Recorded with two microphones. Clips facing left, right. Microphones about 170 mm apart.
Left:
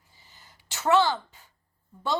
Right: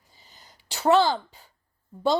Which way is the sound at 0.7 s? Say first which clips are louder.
Right 3 dB; 35° right (ahead or behind).